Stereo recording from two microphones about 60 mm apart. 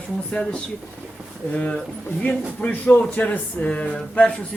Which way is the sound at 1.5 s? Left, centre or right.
Centre.